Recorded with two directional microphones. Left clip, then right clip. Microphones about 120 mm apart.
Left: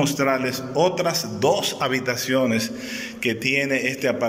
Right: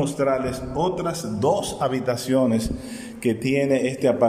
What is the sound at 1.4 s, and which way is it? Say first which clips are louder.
A man's voice: even; 45° right (ahead or behind).